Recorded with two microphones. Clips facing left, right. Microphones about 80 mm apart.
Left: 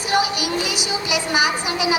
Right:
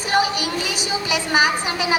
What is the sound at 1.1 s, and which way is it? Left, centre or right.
Speech, right.